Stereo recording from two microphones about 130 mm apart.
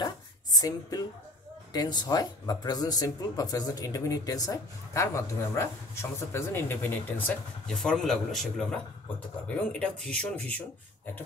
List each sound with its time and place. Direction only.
0.0 s a sound: 30° left (ahead or behind)
1.7 s speech: 30° left (ahead or behind); by 7.7 s 15° left (ahead or behind)
7.7 s a man's voice: 5° left (ahead or behind)
9.7 s speech: 10° left (ahead or behind)